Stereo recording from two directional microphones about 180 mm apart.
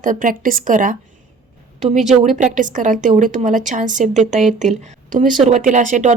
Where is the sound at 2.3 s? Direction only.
45° right (ahead or behind).